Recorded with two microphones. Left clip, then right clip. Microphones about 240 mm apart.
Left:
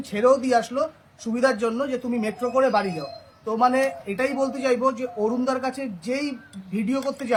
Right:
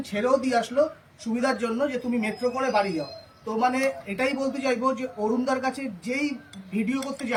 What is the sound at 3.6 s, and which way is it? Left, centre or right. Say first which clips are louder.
A man's voice: left 4 dB; centre.